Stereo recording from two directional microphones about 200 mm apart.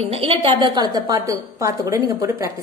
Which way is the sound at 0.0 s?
30° right (ahead or behind).